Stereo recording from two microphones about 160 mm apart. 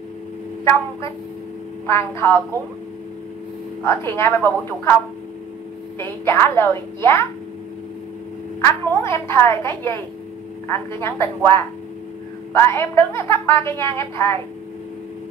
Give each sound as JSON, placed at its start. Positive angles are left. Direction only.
{"t": 1.9, "sound": "a woman's voice", "side_deg": 15}
{"t": 3.8, "sound": "a woman's voice", "side_deg": 15}
{"t": 5.9, "sound": "a woman's voice", "side_deg": 15}
{"t": 8.5, "sound": "a woman's voice", "side_deg": 15}